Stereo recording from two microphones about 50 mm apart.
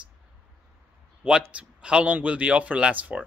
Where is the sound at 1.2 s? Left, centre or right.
Centre.